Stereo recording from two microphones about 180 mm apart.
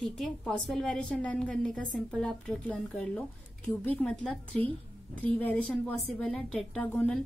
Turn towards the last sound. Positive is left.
turn(degrees=5)  # may be behind; listen again after turning